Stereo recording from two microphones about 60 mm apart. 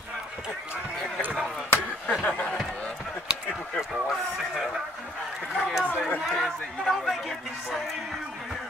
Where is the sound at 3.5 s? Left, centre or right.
Centre.